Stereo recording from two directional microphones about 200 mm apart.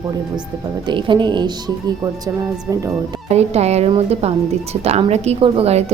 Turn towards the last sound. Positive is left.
turn(degrees=-30)  # may be behind; listen again after turning